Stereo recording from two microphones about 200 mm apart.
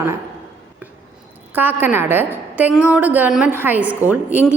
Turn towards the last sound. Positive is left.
turn(degrees=-10)  # may be behind; listen again after turning